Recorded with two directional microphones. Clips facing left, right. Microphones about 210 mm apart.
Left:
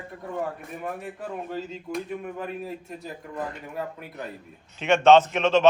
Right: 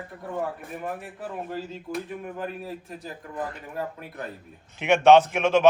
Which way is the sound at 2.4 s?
Centre (ahead or behind).